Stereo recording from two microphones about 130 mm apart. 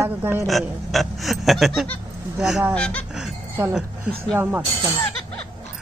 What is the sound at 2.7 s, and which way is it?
Speech, 10° left (ahead or behind).